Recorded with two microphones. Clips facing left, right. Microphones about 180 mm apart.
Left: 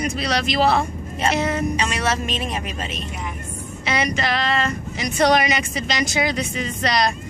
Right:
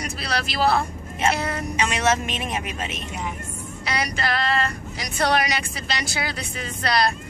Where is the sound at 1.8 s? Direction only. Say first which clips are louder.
Right 1 dB; 15° right (ahead or behind).